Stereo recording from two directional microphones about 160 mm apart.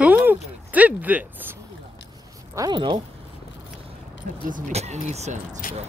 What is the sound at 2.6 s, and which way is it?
Speech, 30° right (ahead or behind).